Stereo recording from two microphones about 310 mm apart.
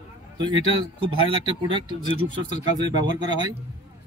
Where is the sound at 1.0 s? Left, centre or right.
Centre.